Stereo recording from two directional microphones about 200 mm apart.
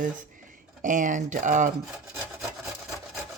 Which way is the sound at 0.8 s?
40° right (ahead or behind).